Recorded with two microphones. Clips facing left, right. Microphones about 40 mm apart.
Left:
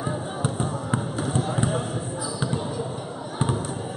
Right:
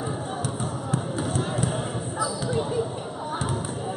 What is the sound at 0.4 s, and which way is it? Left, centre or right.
Basketball bounce, left.